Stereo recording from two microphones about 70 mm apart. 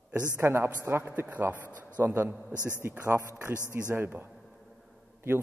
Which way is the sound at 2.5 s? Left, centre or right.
Left.